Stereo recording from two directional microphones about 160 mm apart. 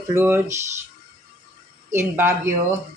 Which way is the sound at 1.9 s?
15° right (ahead or behind).